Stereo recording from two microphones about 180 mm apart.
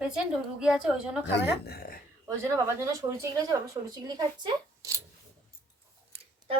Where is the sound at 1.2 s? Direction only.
65° left (ahead or behind).